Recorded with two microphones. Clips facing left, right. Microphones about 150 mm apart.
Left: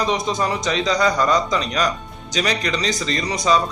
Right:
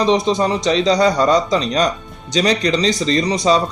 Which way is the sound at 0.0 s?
30° right (ahead or behind).